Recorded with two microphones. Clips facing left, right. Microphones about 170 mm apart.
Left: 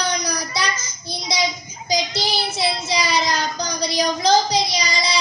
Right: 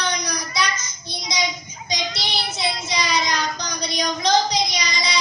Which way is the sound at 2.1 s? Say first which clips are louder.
Left 5 dB; 30° left (ahead or behind).